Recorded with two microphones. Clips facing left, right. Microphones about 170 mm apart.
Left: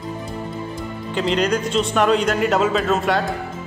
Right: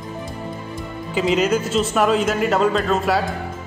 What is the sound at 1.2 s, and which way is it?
A man's voice, 5° right (ahead or behind).